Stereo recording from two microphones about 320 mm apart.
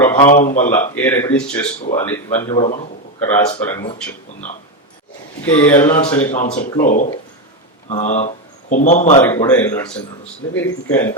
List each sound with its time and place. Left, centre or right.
0.0 s a sound: centre
0.4 s a man's voice: left
0.7 s a man's voice: centre
2.5 s a man's voice: left
3.2 s a man's voice: centre
5.5 s a man's voice: centre; by 6.6 s left
6.6 s a man's voice: centre
6.8 s a man's voice: left
9.2 s a man's voice: centre